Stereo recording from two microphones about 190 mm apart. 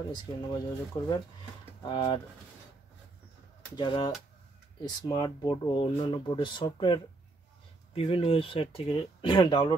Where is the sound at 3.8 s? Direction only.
25° left (ahead or behind).